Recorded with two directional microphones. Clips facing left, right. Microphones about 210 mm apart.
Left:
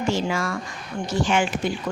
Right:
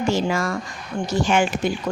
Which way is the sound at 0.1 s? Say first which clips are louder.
Right 2 dB; 40° right (ahead or behind).